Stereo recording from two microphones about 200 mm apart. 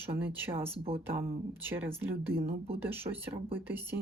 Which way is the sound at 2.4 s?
50° right (ahead or behind).